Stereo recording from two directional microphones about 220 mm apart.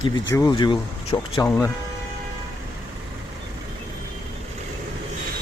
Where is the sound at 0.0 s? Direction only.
15° left (ahead or behind).